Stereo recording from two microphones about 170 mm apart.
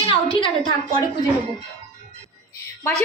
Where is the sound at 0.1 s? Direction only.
30° left (ahead or behind).